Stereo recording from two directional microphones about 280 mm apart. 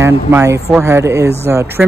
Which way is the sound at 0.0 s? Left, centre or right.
Centre.